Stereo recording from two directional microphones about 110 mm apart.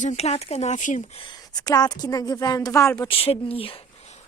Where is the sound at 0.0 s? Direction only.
85° left.